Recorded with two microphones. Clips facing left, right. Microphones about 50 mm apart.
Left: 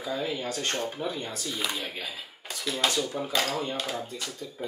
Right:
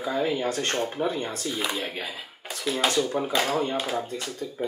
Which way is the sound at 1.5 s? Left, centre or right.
Centre.